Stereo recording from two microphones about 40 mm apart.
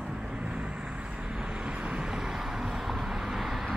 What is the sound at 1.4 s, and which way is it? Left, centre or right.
Vehicle, right.